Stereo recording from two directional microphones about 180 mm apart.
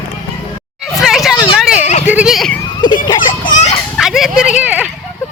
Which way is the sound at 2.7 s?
25° left (ahead or behind).